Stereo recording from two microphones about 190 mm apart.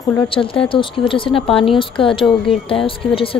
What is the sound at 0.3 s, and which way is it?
A woman's voice, 25° left (ahead or behind).